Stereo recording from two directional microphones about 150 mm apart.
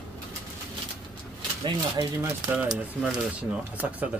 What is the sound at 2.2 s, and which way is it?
Speech, 10° right (ahead or behind).